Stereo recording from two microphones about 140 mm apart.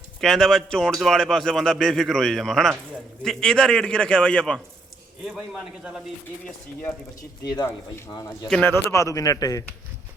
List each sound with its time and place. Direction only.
0.2 s a man's voice: 5° left (ahead or behind)
8.4 s a man's voice: 5° left (ahead or behind)
8.7 s speech: 20° left (ahead or behind)